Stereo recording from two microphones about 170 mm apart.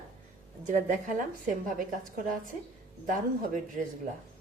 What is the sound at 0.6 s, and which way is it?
Speech, 50° right (ahead or behind).